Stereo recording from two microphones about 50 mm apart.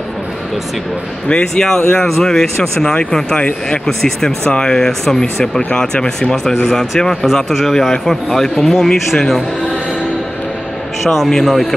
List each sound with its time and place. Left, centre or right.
1.5 s a man's voice: centre
3.3 s speech: left
3.8 s a man's voice: centre
11.1 s speech: centre